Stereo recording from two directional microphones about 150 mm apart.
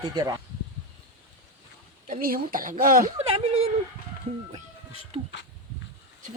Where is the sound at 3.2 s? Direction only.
45° right (ahead or behind).